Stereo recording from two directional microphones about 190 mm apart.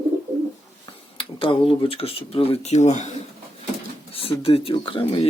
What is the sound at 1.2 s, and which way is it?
Speech, 30° left (ahead or behind).